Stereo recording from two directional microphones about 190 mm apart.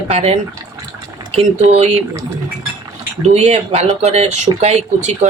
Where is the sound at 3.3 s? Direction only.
35° right (ahead or behind).